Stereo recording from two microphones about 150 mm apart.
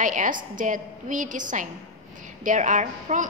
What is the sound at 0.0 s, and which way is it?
A woman's voice, 60° right (ahead or behind).